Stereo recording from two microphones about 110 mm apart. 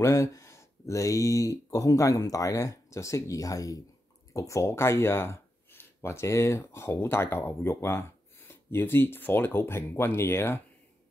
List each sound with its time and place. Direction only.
0.0 s speech: 30° left (ahead or behind)